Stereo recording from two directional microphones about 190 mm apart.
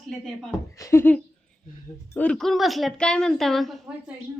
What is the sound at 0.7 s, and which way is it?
Speech, 15° left (ahead or behind).